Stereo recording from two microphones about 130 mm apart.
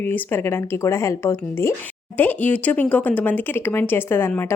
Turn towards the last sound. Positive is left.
turn(degrees=15)  # may be behind; listen again after turning